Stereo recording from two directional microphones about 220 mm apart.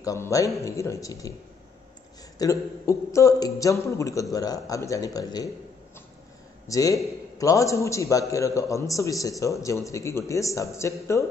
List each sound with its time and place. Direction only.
0.0 s a man's voice: 15° left (ahead or behind)
2.3 s a man's voice: 15° left (ahead or behind)
6.7 s a man's voice: 15° left (ahead or behind)